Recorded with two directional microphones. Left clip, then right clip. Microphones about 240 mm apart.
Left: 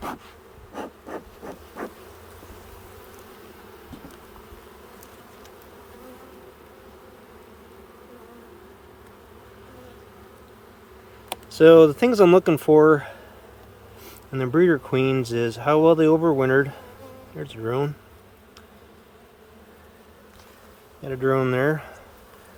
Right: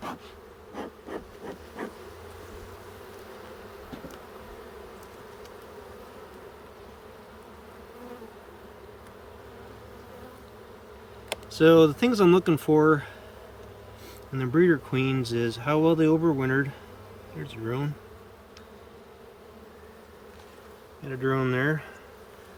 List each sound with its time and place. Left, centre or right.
11.5 s speech: centre
14.3 s speech: centre
21.0 s speech: left